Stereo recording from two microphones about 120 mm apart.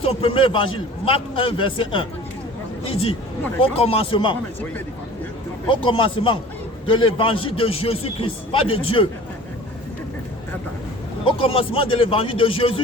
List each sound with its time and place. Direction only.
0.0 s a man's voice: 50° left (ahead or behind)
5.6 s a man's voice: 45° left (ahead or behind)
11.3 s a man's voice: 50° left (ahead or behind)